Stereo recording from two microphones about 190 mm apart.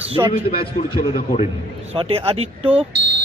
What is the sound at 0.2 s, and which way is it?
Speech, 20° right (ahead or behind).